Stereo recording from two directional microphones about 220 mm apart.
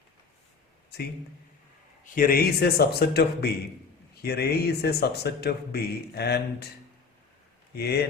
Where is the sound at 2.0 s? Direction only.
40° left (ahead or behind).